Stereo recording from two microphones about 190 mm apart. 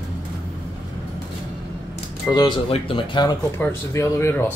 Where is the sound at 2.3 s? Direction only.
5° left (ahead or behind).